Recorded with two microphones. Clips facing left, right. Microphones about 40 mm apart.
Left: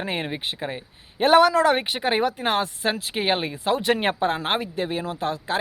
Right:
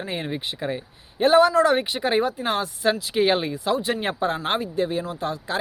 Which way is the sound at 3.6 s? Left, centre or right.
Left.